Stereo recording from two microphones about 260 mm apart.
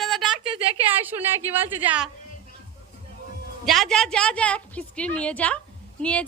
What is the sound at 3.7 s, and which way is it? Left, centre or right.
A woman's voice, centre.